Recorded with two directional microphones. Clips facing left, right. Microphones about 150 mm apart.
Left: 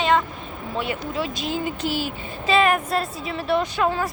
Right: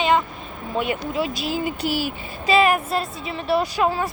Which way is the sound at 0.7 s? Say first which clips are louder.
Right 3 dB; 15° right (ahead or behind).